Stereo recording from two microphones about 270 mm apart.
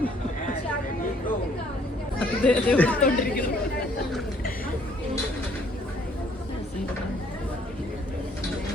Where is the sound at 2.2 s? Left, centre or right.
Centre.